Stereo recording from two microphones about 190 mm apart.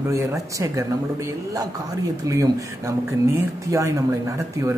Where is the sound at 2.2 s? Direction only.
15° right (ahead or behind).